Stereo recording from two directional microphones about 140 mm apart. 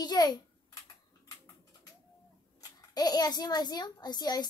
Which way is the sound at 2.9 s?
30° left (ahead or behind).